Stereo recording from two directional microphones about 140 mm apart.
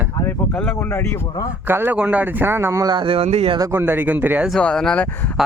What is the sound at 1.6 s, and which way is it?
Speech, 15° right (ahead or behind).